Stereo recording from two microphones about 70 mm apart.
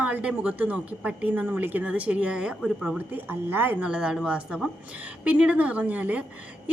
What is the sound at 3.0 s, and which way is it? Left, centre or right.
Speech, right.